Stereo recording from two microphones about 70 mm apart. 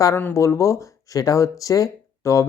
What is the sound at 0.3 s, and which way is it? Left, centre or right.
Speech, left.